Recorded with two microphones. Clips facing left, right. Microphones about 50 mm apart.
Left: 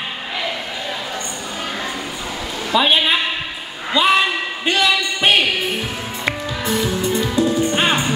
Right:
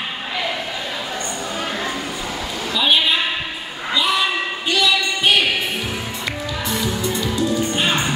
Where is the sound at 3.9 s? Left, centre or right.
Left.